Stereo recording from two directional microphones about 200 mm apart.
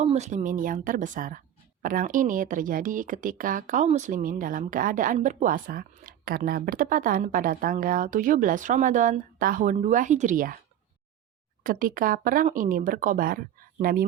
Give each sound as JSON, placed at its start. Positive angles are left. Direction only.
{"t": 0.0, "sound": "speech", "side_deg": -35}
{"t": 11.6, "sound": "speech", "side_deg": -45}